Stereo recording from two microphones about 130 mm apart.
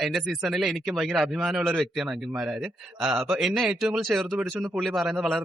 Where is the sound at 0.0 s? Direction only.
Centre (ahead or behind).